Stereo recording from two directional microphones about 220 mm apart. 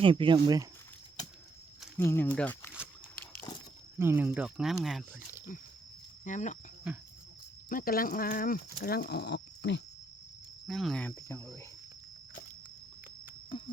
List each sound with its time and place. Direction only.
0.0 s speech: 25° right (ahead or behind)
2.0 s speech: 10° left (ahead or behind)
3.9 s speech: 10° right (ahead or behind)
6.2 s speech: 35° left (ahead or behind)
6.8 s speech: 5° right (ahead or behind)
7.7 s speech: 40° left (ahead or behind)
10.7 s cricket: centre (ahead or behind)
13.5 s a sound: 25° left (ahead or behind)